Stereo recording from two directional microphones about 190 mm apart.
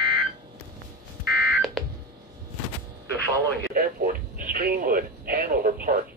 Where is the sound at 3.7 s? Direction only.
50° right (ahead or behind).